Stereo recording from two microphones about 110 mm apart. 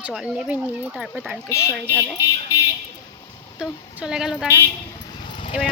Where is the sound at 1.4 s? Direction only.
25° left (ahead or behind).